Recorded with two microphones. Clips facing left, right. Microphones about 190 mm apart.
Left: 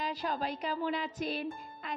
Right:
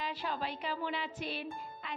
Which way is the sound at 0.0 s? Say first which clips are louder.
Left 3 dB; 40° left (ahead or behind).